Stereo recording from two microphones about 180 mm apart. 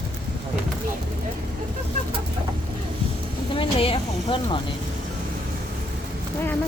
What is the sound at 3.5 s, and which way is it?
Speech, 30° left (ahead or behind).